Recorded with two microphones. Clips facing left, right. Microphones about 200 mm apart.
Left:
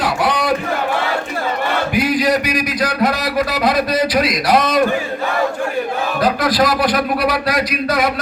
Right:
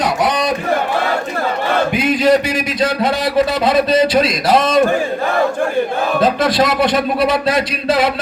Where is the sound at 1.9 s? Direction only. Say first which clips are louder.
Right 2 dB; 25° right (ahead or behind).